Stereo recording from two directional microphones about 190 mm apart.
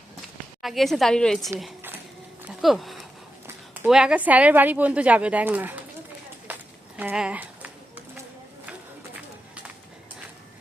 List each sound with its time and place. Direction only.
0.6 s a woman's voice: centre (ahead or behind)
2.5 s a sound: centre (ahead or behind)
3.4 s a woman's voice: 5° right (ahead or behind)
6.5 s run: 10° right (ahead or behind)